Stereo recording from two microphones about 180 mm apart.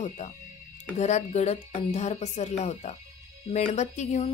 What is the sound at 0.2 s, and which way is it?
Speech, 40° left (ahead or behind).